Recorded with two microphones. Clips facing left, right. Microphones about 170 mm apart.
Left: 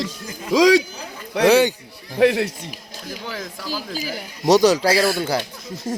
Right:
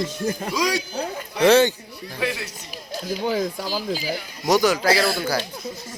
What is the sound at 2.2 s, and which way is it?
Speech, 65° left (ahead or behind).